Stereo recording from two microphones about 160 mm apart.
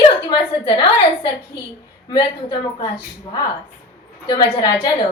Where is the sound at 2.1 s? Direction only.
30° left (ahead or behind).